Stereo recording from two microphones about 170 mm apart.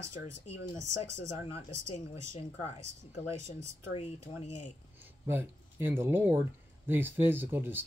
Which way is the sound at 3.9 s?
40° left (ahead or behind).